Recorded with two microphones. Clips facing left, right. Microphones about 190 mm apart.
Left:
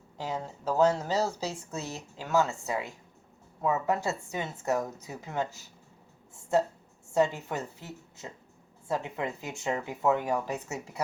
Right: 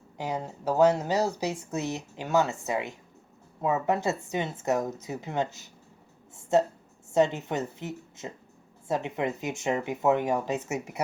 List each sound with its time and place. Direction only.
0.2 s speech: 15° right (ahead or behind)
7.1 s speech: 20° right (ahead or behind)